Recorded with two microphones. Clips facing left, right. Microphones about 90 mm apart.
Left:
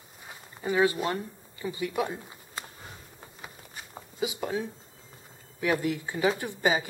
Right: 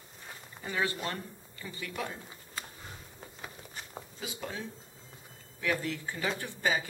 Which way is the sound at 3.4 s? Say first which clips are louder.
Even; 5° left (ahead or behind).